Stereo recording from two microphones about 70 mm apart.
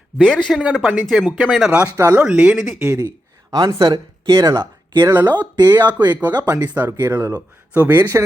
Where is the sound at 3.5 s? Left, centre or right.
Right.